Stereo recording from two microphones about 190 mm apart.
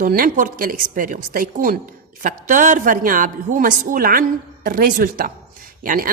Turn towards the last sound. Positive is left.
turn(degrees=-45)  # may be behind; listen again after turning